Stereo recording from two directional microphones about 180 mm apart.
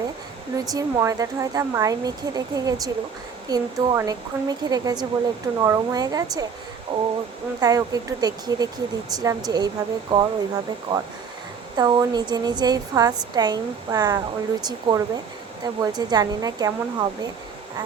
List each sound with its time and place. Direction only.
0.5 s speech: 20° right (ahead or behind)